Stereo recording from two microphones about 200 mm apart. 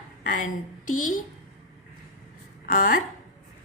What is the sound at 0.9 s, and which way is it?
Speech, 40° left (ahead or behind).